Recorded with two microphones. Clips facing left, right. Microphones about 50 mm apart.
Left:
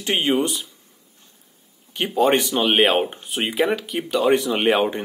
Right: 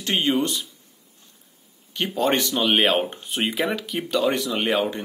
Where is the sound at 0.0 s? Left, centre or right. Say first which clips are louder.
Left 2 dB; centre.